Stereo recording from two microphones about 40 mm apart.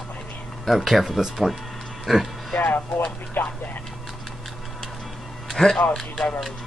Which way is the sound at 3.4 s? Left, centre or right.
Left.